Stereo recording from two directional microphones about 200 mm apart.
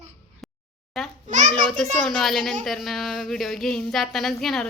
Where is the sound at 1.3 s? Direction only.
40° right (ahead or behind).